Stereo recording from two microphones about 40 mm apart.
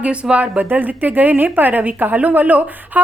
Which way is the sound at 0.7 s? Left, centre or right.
Right.